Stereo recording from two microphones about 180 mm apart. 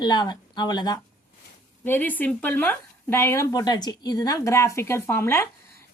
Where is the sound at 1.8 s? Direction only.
10° left (ahead or behind).